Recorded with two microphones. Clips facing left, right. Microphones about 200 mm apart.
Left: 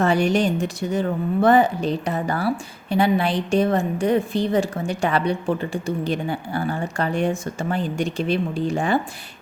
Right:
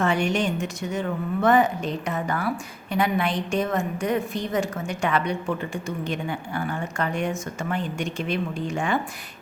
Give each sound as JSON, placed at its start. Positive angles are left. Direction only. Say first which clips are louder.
{"t": 0.0, "sound": "a woman's voice", "louder": "left 4 dB", "side_deg": 35}